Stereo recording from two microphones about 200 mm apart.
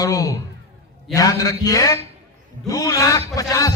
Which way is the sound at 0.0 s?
15° left (ahead or behind).